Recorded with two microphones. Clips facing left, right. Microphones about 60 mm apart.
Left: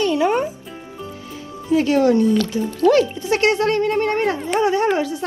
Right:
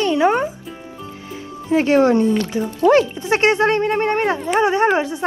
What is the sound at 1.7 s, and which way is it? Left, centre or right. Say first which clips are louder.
Speech: right 1 dB; right.